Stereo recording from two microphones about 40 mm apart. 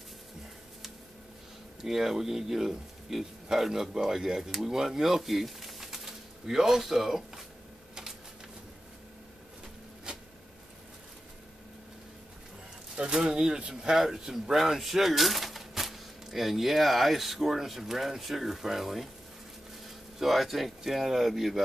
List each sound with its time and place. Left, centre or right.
1.9 s speech: centre
10.1 s a sound: right
12.9 s speech: right; by 19.0 s centre
20.2 s speech: centre